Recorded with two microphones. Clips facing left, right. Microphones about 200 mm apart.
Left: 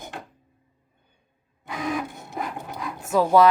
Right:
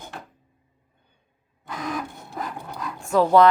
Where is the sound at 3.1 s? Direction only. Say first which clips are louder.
Right 1 dB; 10° left (ahead or behind).